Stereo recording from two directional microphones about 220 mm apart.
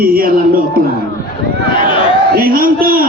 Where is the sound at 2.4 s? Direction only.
40° right (ahead or behind).